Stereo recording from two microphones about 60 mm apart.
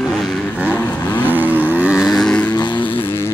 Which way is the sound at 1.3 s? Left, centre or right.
Right.